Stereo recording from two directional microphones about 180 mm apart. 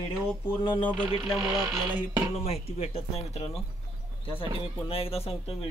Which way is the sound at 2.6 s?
35° left (ahead or behind).